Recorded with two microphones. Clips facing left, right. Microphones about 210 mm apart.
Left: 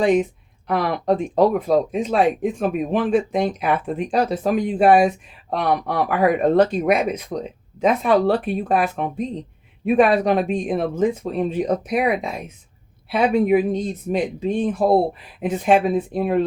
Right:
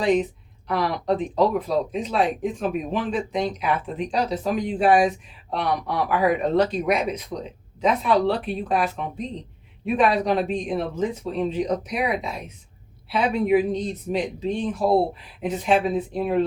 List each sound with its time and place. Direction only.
0.0 s speech: 50° left (ahead or behind)